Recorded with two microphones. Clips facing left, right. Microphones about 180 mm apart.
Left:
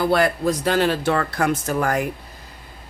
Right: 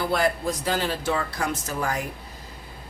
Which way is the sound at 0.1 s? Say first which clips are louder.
Left 5 dB; 70° left (ahead or behind).